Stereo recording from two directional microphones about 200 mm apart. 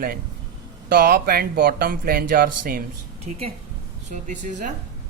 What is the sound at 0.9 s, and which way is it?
Speech, 45° right (ahead or behind).